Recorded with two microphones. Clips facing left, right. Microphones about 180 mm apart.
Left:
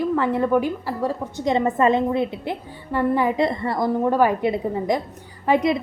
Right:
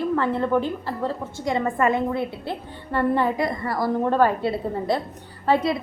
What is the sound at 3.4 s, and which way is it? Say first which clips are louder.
Speech: left 3 dB; 25° left (ahead or behind).